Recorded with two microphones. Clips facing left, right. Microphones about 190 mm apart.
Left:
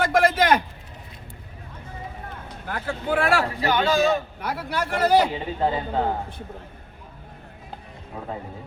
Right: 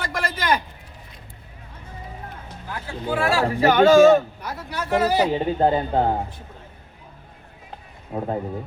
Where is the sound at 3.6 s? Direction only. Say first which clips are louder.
Right 12 dB; 45° right (ahead or behind).